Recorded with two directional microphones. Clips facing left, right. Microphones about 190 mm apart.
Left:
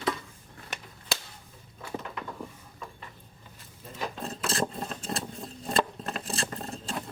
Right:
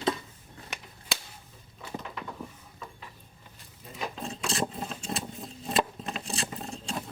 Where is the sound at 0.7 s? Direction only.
Centre (ahead or behind).